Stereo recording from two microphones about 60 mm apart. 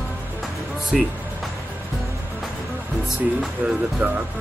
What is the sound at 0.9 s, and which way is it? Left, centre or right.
Speech, centre.